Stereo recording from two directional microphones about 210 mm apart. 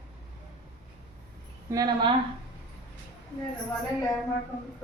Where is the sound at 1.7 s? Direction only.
20° right (ahead or behind).